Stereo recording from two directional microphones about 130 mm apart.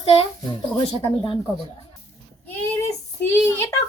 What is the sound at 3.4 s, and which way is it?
Speech, 20° left (ahead or behind).